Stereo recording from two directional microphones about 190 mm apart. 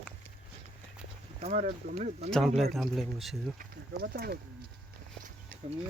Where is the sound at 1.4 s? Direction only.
35° right (ahead or behind).